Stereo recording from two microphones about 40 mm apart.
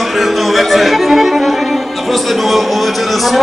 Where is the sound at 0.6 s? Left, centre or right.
Centre.